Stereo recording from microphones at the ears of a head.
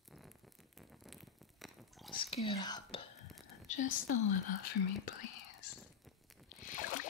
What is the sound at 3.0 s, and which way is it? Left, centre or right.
Whispering, left.